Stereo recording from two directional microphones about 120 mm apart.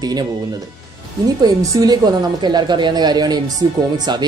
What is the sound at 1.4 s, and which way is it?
Speech, 30° right (ahead or behind).